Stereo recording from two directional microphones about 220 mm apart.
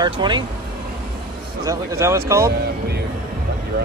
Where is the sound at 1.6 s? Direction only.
15° right (ahead or behind).